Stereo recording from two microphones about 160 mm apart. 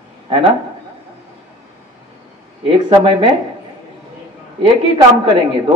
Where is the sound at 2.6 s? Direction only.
30° right (ahead or behind).